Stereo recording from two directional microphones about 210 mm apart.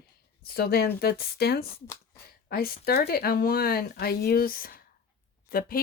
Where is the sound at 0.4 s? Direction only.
50° left (ahead or behind).